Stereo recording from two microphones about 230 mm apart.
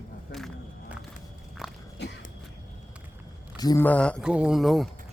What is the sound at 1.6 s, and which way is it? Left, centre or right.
Biting, centre.